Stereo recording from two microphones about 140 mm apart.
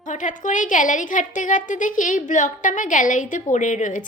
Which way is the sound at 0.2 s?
65° left (ahead or behind).